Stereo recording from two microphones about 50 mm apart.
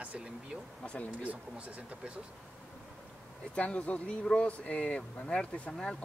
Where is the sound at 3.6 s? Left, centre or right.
Left.